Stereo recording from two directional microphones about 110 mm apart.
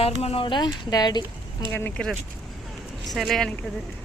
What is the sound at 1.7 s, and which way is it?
Speech, 20° left (ahead or behind).